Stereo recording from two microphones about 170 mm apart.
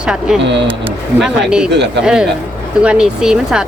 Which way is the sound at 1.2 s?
5° right (ahead or behind).